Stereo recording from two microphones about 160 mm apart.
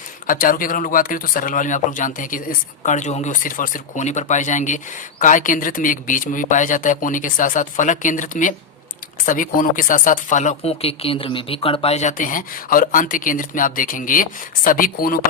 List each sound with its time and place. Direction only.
0.3 s speech: 60° left (ahead or behind)